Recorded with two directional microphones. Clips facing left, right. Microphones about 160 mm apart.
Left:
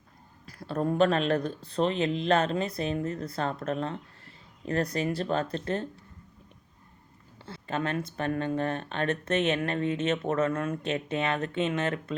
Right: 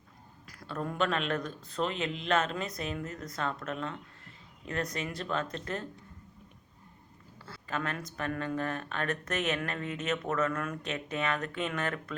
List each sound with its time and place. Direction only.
0.4 s speech: 35° left (ahead or behind)
7.4 s speech: 25° left (ahead or behind)